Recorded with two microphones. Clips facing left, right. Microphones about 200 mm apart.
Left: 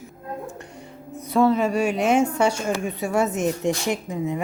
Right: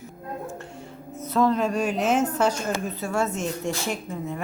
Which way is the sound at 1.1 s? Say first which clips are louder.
Left 3 dB; 15° left (ahead or behind).